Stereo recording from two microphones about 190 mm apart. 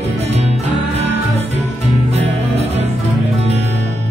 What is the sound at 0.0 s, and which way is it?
Music, 35° right (ahead or behind).